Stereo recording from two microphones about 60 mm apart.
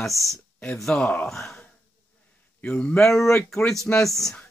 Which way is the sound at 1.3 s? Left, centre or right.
Centre.